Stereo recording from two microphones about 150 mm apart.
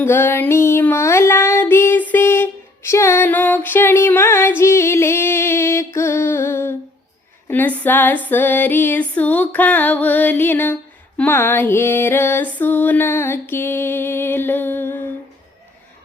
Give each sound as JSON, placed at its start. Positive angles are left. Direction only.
{"t": 0.0, "sound": "music", "side_deg": 15}
{"t": 7.4, "sound": "female singing", "side_deg": 15}